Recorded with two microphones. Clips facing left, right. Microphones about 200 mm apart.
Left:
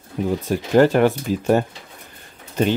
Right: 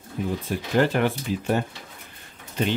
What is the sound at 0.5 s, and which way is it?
Speech, 45° left (ahead or behind).